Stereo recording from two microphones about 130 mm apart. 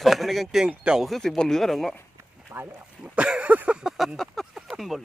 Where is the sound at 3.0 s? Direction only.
10° right (ahead or behind).